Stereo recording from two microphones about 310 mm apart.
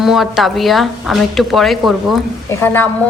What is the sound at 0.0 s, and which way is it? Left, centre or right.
A woman's voice, centre.